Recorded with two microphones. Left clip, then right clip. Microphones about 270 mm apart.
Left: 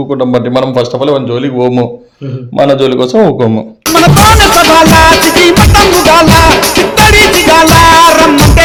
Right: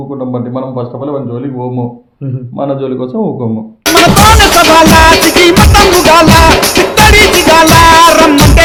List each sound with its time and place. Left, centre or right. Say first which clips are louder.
0.2 s a man's voice: left 8 dB; left
3.8 s music: even; centre